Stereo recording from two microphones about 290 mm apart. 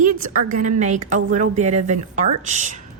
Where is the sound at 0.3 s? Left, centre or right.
Right.